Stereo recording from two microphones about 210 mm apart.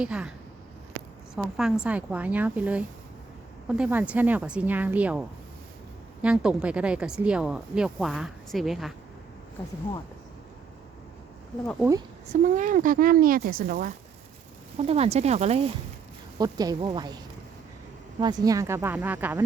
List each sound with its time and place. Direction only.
0.0 s speech: 5° right (ahead or behind)
1.4 s speech: centre (ahead or behind)
6.2 s speech: 5° right (ahead or behind)
11.6 s speech: 5° left (ahead or behind)
12.3 s speech: 40° right (ahead or behind)
14.8 s speech: 30° right (ahead or behind)
16.4 s a woman's voice: 20° right (ahead or behind)
18.2 s speech: 20° right (ahead or behind)